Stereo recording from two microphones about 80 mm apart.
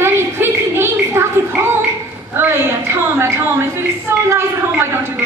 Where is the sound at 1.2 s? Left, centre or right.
Right.